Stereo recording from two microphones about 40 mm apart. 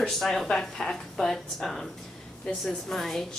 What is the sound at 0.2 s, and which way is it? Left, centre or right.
A woman's voice, centre.